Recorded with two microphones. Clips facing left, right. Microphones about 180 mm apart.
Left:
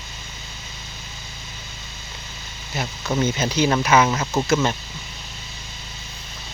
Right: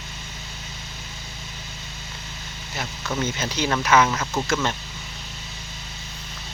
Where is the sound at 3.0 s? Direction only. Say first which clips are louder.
Left 5 dB; 15° left (ahead or behind).